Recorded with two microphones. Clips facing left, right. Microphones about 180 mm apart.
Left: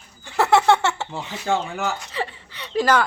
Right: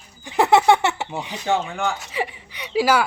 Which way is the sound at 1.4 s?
Centre (ahead or behind).